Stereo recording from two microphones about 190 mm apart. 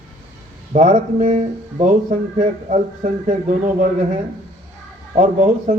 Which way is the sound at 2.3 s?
40° right (ahead or behind).